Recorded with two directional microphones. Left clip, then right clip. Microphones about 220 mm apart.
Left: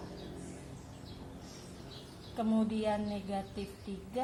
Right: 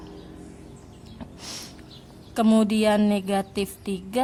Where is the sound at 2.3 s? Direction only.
45° right (ahead or behind).